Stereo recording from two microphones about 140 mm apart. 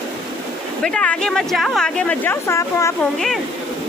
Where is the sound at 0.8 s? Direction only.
5° left (ahead or behind).